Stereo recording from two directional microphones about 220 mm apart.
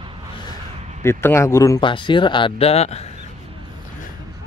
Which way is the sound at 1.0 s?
10° left (ahead or behind).